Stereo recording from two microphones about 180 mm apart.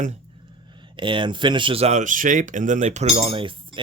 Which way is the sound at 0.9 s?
25° right (ahead or behind).